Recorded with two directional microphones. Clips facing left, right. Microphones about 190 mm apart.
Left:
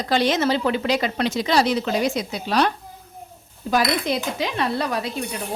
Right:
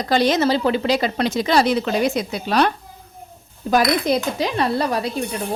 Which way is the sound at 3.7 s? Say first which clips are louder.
Right 4 dB; 45° right (ahead or behind).